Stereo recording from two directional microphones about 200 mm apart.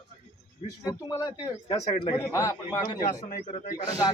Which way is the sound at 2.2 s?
15° left (ahead or behind).